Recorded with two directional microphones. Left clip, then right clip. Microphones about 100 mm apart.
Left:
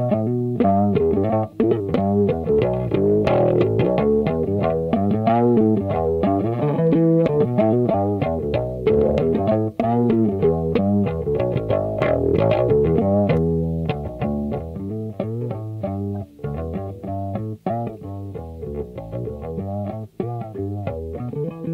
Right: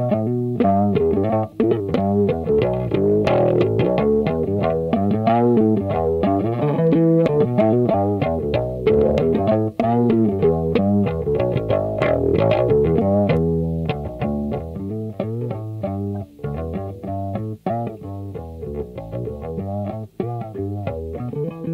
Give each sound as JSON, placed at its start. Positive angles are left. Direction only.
{"t": 0.0, "sound": "music", "side_deg": -25}
{"t": 17.3, "sound": "music", "side_deg": -25}